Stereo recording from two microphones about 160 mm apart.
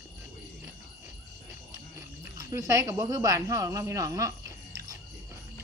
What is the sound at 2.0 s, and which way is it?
Speech, 20° right (ahead or behind).